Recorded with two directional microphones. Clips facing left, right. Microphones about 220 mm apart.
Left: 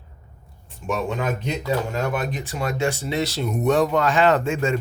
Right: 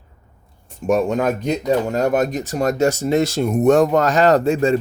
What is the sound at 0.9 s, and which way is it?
Speech, 45° right (ahead or behind).